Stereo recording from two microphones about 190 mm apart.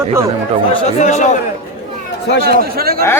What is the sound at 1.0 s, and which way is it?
Speech, 40° left (ahead or behind).